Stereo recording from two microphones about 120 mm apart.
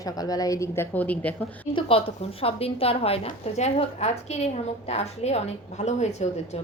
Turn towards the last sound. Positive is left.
turn(degrees=70)  # may be behind; listen again after turning